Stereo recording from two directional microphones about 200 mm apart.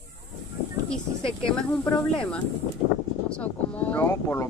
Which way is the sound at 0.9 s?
5° left (ahead or behind).